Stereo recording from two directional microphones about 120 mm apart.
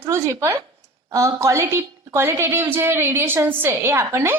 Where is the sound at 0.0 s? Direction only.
20° right (ahead or behind).